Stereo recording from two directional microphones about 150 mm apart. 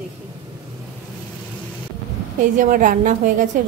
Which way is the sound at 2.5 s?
65° right (ahead or behind).